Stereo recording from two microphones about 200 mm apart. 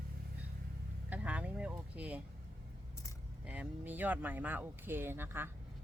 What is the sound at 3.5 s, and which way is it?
Speech, 5° right (ahead or behind).